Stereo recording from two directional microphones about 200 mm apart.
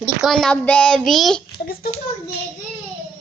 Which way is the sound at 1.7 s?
45° left (ahead or behind).